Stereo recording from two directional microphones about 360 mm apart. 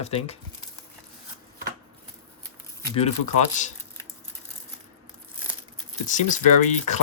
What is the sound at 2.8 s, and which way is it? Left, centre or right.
Speech, centre.